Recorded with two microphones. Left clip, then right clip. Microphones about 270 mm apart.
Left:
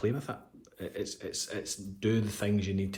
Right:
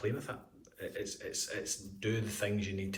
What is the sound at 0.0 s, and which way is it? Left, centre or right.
Speech, left.